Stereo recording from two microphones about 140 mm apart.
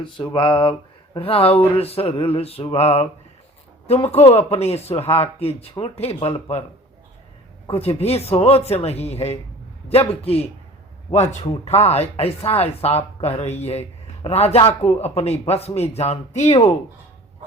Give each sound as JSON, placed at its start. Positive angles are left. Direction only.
{"t": 0.0, "sound": "speech", "side_deg": 35}
{"t": 7.7, "sound": "a man's voice", "side_deg": 45}